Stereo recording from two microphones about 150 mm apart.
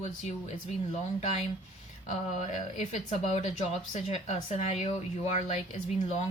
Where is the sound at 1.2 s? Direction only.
50° left (ahead or behind).